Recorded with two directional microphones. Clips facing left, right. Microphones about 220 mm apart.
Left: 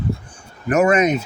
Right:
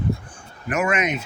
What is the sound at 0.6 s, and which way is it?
Speech, 40° left (ahead or behind).